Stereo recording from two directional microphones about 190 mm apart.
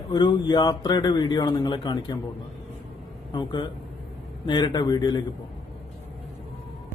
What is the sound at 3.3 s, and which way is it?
Speech, 20° left (ahead or behind).